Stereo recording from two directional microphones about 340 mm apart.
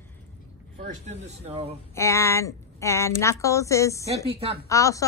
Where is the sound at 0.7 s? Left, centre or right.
Centre.